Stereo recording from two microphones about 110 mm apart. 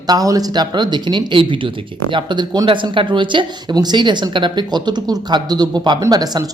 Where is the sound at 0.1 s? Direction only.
35° right (ahead or behind).